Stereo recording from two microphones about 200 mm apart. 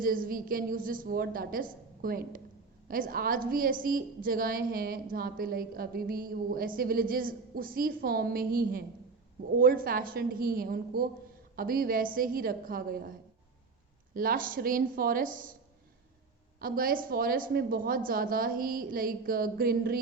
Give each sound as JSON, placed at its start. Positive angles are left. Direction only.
{"t": 0.0, "sound": "a woman's voice", "side_deg": -45}
{"t": 16.6, "sound": "a woman's voice", "side_deg": -45}